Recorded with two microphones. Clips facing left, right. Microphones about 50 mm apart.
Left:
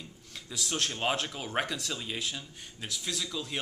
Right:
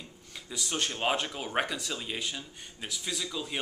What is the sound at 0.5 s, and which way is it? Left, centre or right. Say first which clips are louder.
Speech: even; centre.